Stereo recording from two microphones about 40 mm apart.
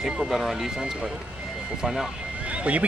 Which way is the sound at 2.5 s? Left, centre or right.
Right.